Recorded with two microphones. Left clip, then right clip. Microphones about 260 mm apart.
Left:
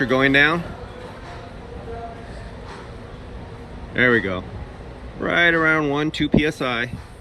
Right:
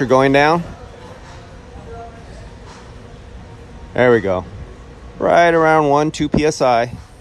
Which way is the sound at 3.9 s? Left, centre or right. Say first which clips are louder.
Right 5 dB; centre.